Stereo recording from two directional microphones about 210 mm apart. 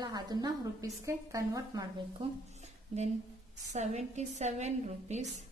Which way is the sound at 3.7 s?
35° right (ahead or behind).